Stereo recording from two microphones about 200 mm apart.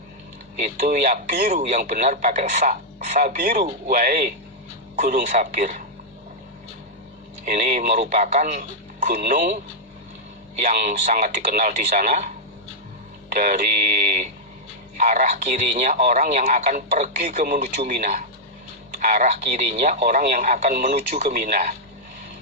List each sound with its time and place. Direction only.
0.6 s speech: 40° right (ahead or behind)
7.4 s speech: 40° right (ahead or behind)
10.6 s speech: 40° right (ahead or behind)
13.3 s speech: 40° right (ahead or behind)
20.0 s speech: 45° right (ahead or behind)
21.1 s speech: 35° right (ahead or behind)